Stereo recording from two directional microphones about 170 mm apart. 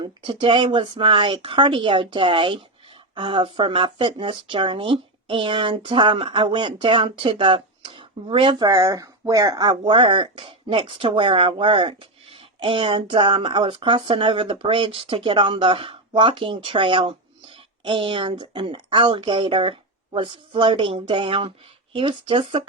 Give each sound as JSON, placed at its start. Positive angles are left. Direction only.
{"t": 0.0, "sound": "speech", "side_deg": -30}